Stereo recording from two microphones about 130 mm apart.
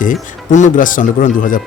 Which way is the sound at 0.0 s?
75° left (ahead or behind).